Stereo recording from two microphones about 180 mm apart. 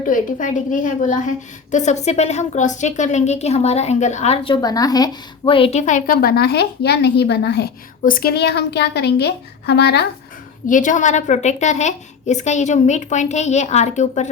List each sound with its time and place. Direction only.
0.0 s a woman's voice: 45° left (ahead or behind); by 10.1 s 65° left (ahead or behind)
10.7 s a woman's voice: 45° left (ahead or behind)